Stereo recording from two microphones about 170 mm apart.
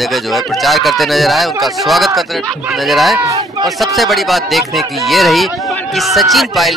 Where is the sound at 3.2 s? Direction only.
20° right (ahead or behind).